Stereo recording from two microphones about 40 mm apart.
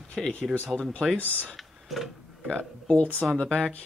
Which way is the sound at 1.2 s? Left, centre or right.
Left.